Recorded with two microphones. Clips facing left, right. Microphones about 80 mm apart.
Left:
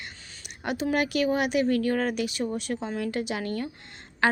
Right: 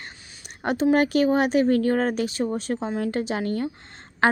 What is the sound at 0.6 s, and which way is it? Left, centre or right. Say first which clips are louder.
Speech: right 6 dB; right.